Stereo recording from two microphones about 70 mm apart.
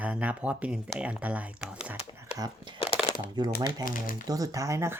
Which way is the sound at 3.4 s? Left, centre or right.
Right.